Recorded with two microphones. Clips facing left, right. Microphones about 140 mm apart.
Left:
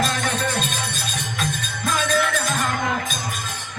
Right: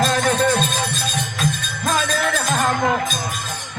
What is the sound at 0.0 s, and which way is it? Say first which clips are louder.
Music: right 6 dB; 40° right (ahead or behind).